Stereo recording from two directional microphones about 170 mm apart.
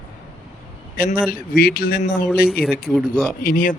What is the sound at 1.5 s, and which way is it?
Speech, 60° left (ahead or behind).